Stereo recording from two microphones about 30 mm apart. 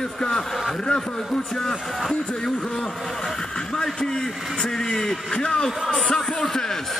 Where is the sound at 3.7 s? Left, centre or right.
Centre.